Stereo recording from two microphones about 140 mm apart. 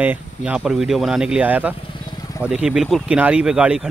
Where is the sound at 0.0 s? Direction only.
10° right (ahead or behind).